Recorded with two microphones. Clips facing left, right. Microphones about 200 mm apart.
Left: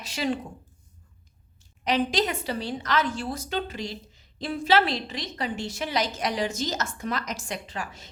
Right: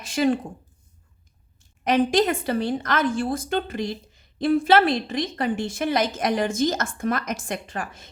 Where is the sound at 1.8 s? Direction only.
50° right (ahead or behind).